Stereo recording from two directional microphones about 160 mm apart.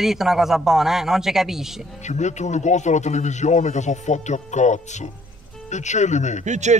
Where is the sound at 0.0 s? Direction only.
Centre (ahead or behind).